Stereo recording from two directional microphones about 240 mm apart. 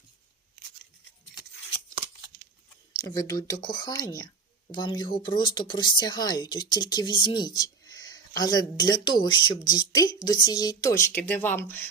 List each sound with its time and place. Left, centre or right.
3.0 s a woman's voice: centre